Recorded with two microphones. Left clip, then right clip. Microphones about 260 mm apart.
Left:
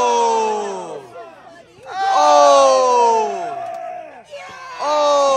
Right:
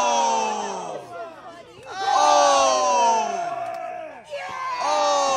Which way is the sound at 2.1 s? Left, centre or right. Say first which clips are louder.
Left 6 dB; centre.